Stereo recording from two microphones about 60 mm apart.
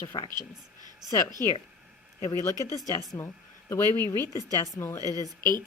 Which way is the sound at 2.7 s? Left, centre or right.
Left.